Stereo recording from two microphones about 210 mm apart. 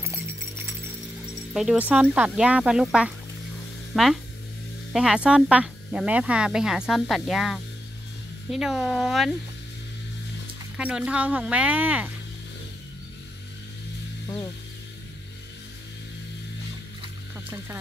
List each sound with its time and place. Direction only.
1.5 s speech: centre (ahead or behind)
10.8 s speech: 5° right (ahead or behind)
14.2 s speech: 20° left (ahead or behind)